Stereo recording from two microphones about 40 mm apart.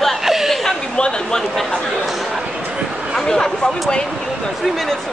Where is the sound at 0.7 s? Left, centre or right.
Left.